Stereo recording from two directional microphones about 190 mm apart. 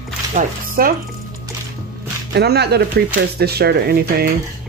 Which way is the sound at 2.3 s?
60° right (ahead or behind).